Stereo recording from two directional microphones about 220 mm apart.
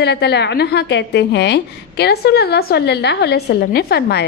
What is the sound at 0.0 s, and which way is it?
A woman's voice, 50° left (ahead or behind).